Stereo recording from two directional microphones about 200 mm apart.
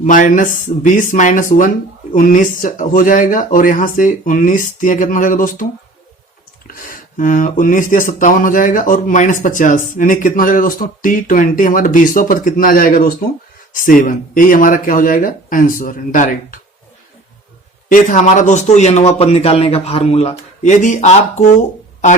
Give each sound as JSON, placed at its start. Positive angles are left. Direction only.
{"t": 0.0, "sound": "speech", "side_deg": 40}
{"t": 6.7, "sound": "speech", "side_deg": 45}
{"t": 17.8, "sound": "speech", "side_deg": 40}